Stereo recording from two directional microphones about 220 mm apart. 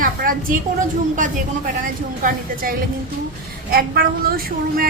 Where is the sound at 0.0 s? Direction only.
40° right (ahead or behind).